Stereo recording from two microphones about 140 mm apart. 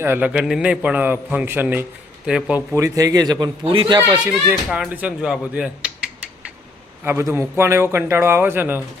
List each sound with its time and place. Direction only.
0.0 s a man's voice: 15° right (ahead or behind)
2.7 s a man's voice: 25° right (ahead or behind)
4.3 s speech: 10° right (ahead or behind)
7.0 s a man's voice: 15° right (ahead or behind)